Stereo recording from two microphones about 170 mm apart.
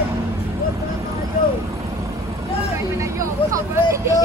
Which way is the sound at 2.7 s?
15° right (ahead or behind).